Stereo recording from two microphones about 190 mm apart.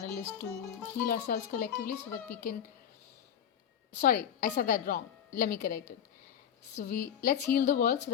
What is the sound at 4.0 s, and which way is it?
A woman's voice, 50° left (ahead or behind).